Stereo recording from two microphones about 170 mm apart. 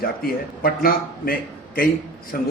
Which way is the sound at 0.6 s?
60° left (ahead or behind).